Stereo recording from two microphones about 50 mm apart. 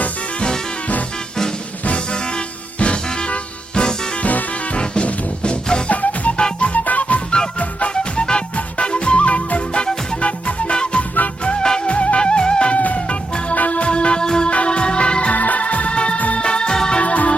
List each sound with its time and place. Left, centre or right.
0.0 s music: centre
2.7 s music: left
5.9 s music: left
8.2 s music: centre
11.9 s music: left
17.0 s music: left